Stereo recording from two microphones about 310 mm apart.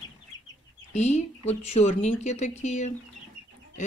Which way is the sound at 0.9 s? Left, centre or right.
Left.